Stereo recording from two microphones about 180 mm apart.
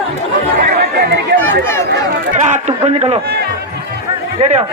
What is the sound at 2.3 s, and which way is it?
Speech, 40° right (ahead or behind).